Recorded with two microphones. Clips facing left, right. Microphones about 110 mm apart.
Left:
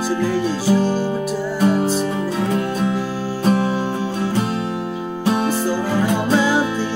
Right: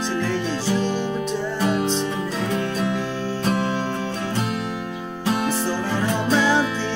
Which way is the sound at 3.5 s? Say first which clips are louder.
Left 5 dB; 10° left (ahead or behind).